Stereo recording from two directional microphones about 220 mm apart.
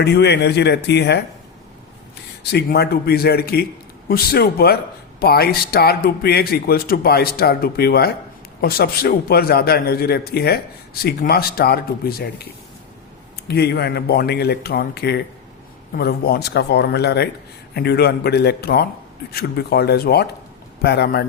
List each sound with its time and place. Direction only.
0.0 s speech: 50° left (ahead or behind)
2.4 s speech: 50° left (ahead or behind)
13.5 s speech: 45° left (ahead or behind)